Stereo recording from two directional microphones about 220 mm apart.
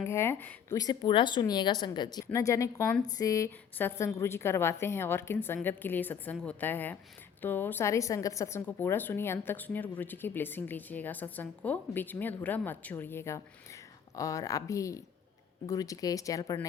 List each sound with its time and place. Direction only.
0.0 s a woman's voice: 10° left (ahead or behind)